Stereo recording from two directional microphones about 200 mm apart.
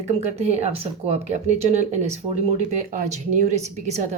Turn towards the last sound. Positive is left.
turn(degrees=-35)  # may be behind; listen again after turning